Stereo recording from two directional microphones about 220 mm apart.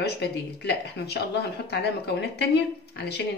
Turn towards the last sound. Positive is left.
turn(degrees=50)  # may be behind; listen again after turning